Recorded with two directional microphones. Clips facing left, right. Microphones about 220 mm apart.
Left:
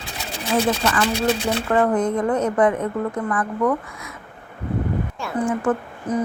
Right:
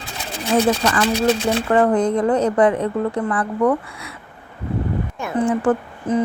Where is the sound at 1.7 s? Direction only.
35° right (ahead or behind).